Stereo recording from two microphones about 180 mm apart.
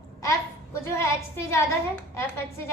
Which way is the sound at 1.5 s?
15° left (ahead or behind).